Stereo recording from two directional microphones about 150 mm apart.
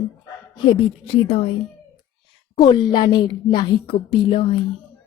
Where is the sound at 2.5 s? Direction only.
30° left (ahead or behind).